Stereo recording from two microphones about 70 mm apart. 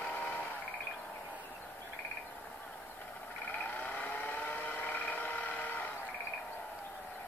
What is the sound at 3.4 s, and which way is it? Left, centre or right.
Vehicle, left.